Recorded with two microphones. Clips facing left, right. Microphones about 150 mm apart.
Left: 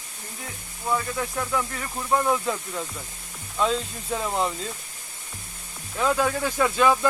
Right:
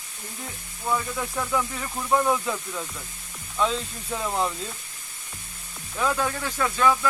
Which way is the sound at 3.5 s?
Centre (ahead or behind).